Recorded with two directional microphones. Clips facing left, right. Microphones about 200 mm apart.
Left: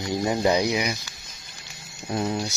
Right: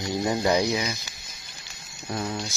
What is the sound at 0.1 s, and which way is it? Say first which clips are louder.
Speech: left 1 dB; 20° left (ahead or behind).